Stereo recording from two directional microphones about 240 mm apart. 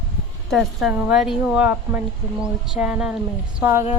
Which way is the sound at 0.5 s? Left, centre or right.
Centre.